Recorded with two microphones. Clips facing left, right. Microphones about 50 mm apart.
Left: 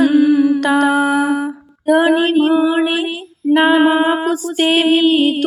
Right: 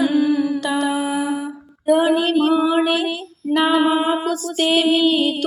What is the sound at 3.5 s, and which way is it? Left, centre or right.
Music, left.